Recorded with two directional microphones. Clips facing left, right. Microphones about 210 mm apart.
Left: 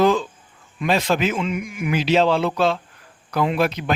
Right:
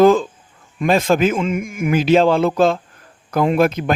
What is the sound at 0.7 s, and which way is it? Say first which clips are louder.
Speech: right 5 dB; 50° right (ahead or behind).